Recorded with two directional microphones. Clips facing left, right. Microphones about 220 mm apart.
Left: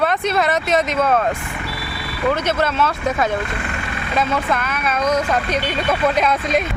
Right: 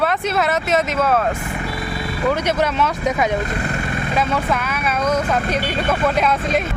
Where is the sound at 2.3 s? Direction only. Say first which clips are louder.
Even; 15° right (ahead or behind).